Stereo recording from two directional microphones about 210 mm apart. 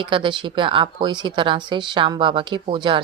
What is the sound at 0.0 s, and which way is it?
Speech, 25° right (ahead or behind).